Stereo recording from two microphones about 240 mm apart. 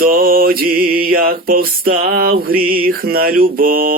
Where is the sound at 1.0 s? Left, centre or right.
Right.